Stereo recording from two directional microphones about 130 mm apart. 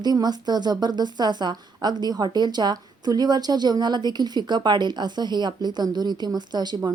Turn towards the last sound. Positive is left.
turn(degrees=-35)  # may be behind; listen again after turning